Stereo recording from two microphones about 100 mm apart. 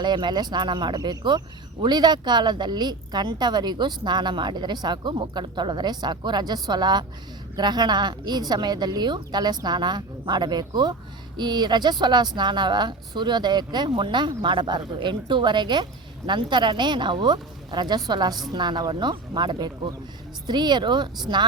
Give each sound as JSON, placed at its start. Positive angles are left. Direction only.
{"t": 0.0, "sound": "a woman's voice", "side_deg": -45}